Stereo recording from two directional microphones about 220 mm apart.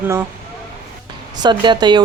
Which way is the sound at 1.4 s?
20° right (ahead or behind).